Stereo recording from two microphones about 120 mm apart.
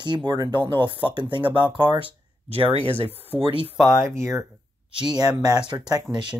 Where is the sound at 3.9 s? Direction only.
25° right (ahead or behind).